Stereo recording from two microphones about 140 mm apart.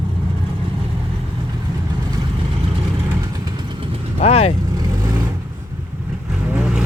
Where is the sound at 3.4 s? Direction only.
35° right (ahead or behind).